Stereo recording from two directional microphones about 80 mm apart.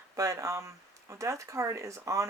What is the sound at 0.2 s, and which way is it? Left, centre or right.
Speech, right.